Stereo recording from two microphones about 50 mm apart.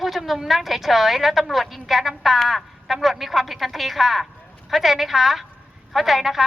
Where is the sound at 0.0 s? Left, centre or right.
Centre.